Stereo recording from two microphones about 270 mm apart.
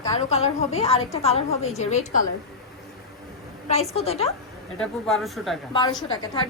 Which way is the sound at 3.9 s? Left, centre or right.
Left.